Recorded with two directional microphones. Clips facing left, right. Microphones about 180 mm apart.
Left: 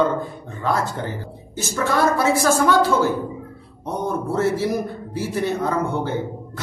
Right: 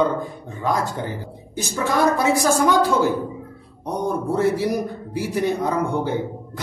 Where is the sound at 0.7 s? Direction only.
15° right (ahead or behind).